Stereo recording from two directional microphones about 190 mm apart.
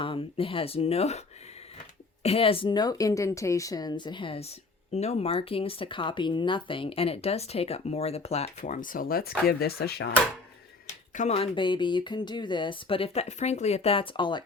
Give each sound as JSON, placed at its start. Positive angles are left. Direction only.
{"t": 0.0, "sound": "speech", "side_deg": 30}
{"t": 2.2, "sound": "speech", "side_deg": 30}
{"t": 11.1, "sound": "speech", "side_deg": 35}